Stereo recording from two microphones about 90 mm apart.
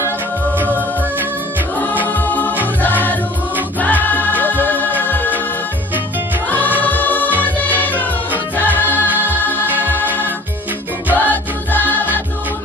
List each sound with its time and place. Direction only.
1.8 s music: 20° left (ahead or behind)
6.8 s music: 20° left (ahead or behind)
9.0 s music: 20° right (ahead or behind)
9.3 s music: 20° left (ahead or behind)
11.1 s music: 20° left (ahead or behind)